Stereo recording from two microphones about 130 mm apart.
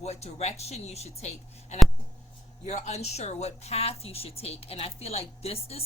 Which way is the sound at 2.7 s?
60° left (ahead or behind).